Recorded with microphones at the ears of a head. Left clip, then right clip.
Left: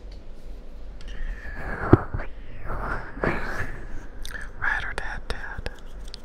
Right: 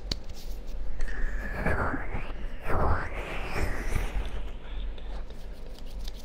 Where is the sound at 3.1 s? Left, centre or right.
Left.